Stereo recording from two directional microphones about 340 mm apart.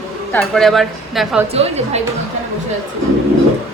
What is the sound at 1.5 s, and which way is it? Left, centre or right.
Speech, centre.